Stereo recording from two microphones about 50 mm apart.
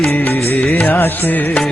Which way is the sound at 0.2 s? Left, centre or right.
Left.